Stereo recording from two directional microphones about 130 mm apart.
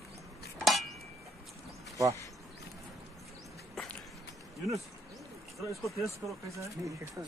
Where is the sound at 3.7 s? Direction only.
5° left (ahead or behind).